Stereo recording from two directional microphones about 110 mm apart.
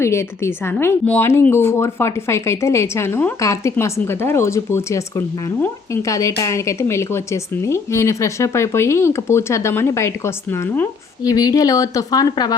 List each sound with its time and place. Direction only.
0.0 s a woman's voice: 25° left (ahead or behind)
11.2 s a woman's voice: 35° left (ahead or behind)